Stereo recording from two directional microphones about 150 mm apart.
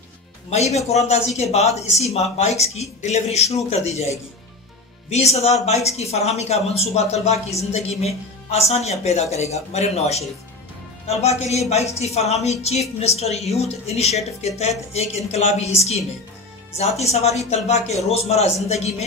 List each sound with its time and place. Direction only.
0.5 s speech: 45° left (ahead or behind)
5.1 s speech: 45° left (ahead or behind)